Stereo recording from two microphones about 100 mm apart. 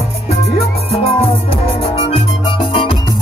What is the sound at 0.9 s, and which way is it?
Music, 80° left.